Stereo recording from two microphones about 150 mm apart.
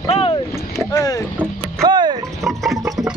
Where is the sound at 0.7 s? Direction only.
20° left (ahead or behind).